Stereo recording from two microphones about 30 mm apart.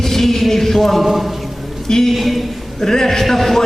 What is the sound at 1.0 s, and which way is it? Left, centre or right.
Speech, centre.